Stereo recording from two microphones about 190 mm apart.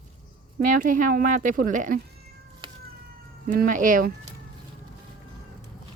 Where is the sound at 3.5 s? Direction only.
45° right (ahead or behind).